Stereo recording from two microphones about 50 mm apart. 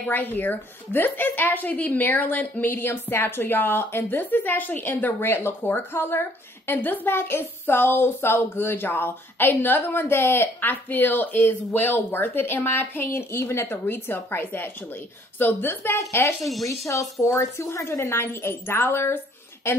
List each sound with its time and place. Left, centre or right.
0.1 s a woman's voice: left
2.7 s a woman's voice: left
13.2 s a woman's voice: left
16.0 s speech: left